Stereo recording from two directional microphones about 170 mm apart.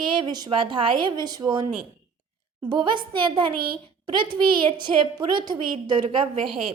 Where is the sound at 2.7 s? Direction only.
25° right (ahead or behind).